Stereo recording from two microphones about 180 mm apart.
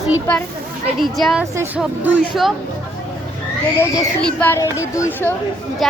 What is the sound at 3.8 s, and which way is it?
Speech, 10° left (ahead or behind).